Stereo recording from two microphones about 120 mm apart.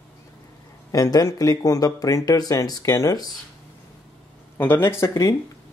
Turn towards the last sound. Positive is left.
turn(degrees=30)  # may be behind; listen again after turning